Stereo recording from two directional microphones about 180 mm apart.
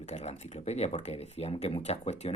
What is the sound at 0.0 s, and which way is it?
Speech, 40° left (ahead or behind).